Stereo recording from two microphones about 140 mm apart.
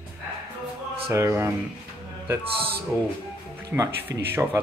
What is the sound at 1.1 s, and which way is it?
Speech, 20° right (ahead or behind).